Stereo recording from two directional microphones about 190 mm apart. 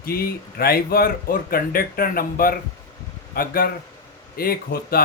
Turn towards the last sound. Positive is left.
turn(degrees=50)  # may be behind; listen again after turning